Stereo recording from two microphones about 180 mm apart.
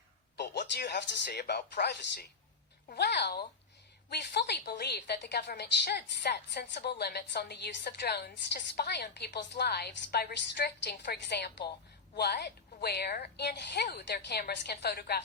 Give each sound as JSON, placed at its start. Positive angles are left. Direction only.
{"t": 0.3, "sound": "a woman's voice", "side_deg": 70}